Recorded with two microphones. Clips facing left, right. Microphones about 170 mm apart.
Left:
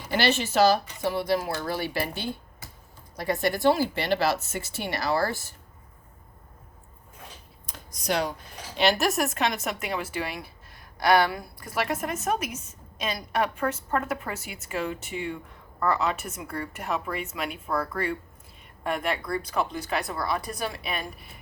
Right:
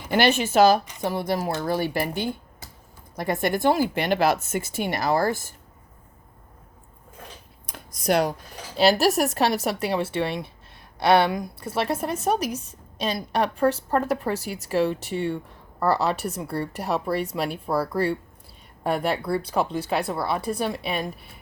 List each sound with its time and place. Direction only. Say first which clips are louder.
0.1 s speech: right 4 dB; 50° right (ahead or behind)
8.0 s a woman's voice: right 6 dB; 50° right (ahead or behind); by 11.5 s 15° right (ahead or behind)
11.6 s a woman's voice: right 2 dB; 30° right (ahead or behind)